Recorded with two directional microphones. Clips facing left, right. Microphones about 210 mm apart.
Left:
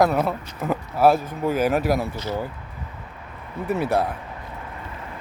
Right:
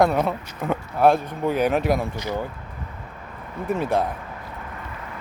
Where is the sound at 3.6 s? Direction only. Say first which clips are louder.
Even; 5° left (ahead or behind).